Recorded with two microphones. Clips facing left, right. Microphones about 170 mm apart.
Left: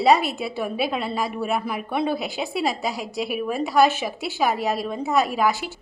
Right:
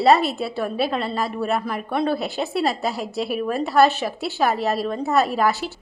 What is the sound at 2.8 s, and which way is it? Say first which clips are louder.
A woman's voice: right 2 dB; centre (ahead or behind).